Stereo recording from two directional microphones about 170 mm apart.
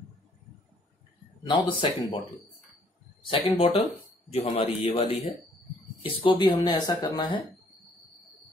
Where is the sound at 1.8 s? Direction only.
30° left (ahead or behind).